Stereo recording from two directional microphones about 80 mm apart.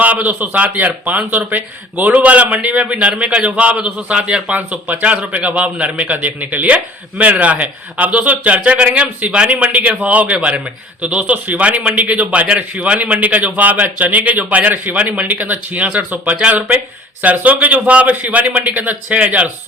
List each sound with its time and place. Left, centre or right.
0.0 s a man's voice: right